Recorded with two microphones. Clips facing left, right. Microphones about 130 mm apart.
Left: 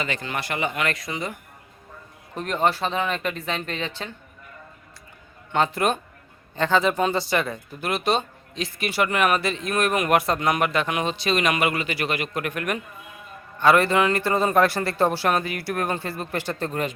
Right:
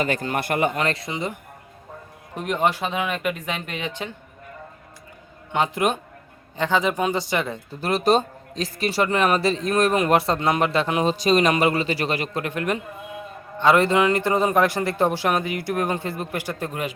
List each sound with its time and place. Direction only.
0.0 s speech: 45° right (ahead or behind)
0.8 s a man's voice: 30° right (ahead or behind)
5.5 s a man's voice: 15° right (ahead or behind)
7.8 s a man's voice: 35° right (ahead or behind); by 16.9 s 10° right (ahead or behind)